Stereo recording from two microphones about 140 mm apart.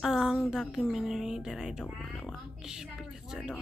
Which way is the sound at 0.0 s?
Centre (ahead or behind).